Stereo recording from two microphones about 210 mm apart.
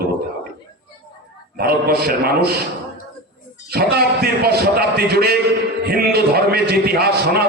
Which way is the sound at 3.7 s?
50° right (ahead or behind).